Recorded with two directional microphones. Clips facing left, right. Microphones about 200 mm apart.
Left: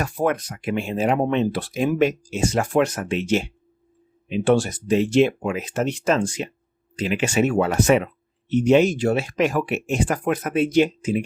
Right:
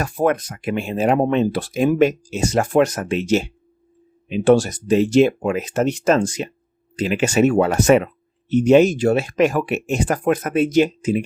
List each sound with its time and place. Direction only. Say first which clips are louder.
0.0 s speech: right 3 dB; 45° right (ahead or behind)